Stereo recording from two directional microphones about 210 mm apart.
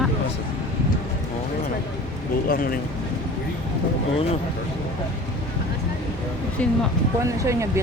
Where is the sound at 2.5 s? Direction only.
45° left (ahead or behind).